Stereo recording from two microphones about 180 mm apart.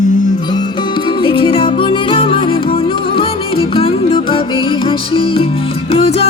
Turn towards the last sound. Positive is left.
turn(degrees=35)  # may be behind; listen again after turning